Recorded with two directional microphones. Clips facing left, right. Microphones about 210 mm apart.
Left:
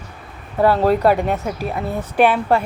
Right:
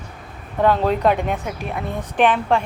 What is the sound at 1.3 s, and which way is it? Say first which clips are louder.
Speech: left 3 dB; 35° left (ahead or behind).